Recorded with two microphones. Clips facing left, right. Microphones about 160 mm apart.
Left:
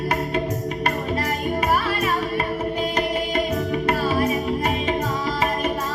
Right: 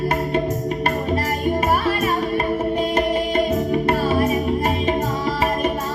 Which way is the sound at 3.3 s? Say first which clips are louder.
Right 4 dB; 25° right (ahead or behind).